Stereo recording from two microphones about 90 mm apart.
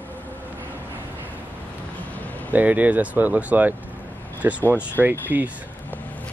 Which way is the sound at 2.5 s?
15° right (ahead or behind).